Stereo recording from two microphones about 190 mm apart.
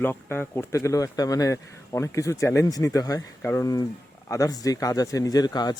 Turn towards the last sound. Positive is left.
turn(degrees=20)  # may be behind; listen again after turning